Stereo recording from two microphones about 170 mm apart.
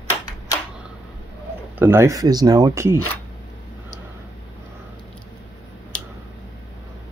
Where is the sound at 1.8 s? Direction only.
15° right (ahead or behind).